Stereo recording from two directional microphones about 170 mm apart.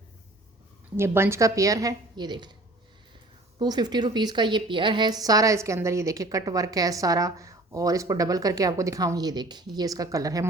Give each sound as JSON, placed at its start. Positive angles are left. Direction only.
{"t": 0.9, "sound": "a woman's voice", "side_deg": -15}
{"t": 3.6, "sound": "a woman's voice", "side_deg": -25}